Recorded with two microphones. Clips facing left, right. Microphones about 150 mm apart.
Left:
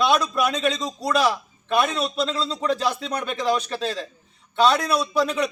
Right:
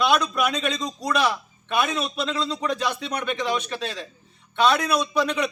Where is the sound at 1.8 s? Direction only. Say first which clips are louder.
Left 2 dB; 35° left (ahead or behind).